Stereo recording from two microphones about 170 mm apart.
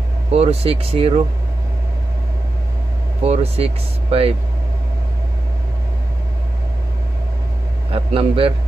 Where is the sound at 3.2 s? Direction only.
40° right (ahead or behind).